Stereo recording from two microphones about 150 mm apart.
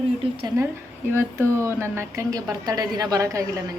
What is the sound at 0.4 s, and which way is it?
Speech, 20° right (ahead or behind).